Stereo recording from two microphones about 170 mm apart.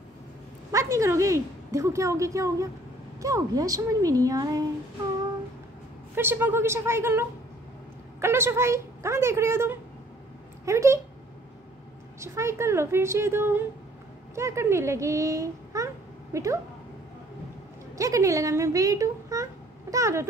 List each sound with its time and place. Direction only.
0.7 s a woman's voice: 20° right (ahead or behind)
6.1 s a woman's voice: 10° right (ahead or behind)
12.2 s a woman's voice: 15° right (ahead or behind)
17.9 s speech: 20° right (ahead or behind)